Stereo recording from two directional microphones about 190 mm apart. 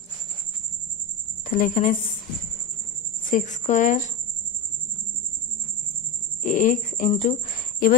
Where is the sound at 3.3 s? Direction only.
40° left (ahead or behind).